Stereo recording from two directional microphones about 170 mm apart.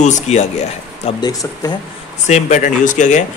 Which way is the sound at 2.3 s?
45° left (ahead or behind).